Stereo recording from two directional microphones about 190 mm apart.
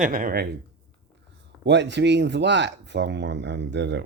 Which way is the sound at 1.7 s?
65° right (ahead or behind).